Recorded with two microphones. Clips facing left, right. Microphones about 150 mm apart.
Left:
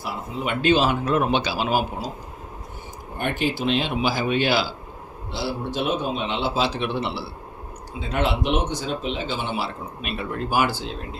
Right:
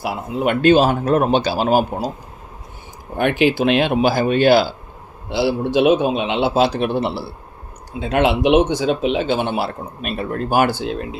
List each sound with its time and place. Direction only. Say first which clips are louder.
0.0 s speech: right 8 dB; 55° right (ahead or behind)
3.2 s a man's voice: right 9 dB; 90° right; by 4.7 s 50° right (ahead or behind)
5.3 s a man's voice: right 10 dB; 85° right; by 7.3 s 45° right (ahead or behind)
7.9 s speech: right 7 dB; 65° right (ahead or behind)
9.6 s speech: right 5 dB; 45° right (ahead or behind)